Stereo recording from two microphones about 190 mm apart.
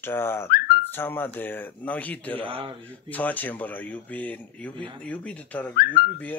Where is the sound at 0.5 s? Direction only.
55° left (ahead or behind).